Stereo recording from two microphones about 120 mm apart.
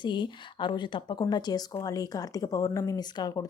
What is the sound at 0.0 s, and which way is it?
Speech, 40° left (ahead or behind).